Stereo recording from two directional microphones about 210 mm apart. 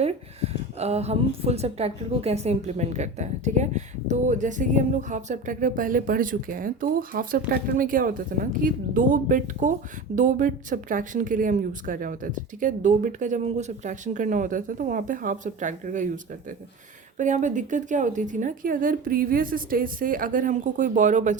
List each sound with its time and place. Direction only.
0.0 s a woman's voice: 30° right (ahead or behind)
17.2 s a woman's voice: 35° right (ahead or behind)